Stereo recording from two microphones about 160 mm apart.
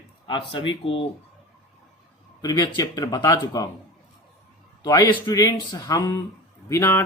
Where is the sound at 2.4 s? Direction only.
25° left (ahead or behind).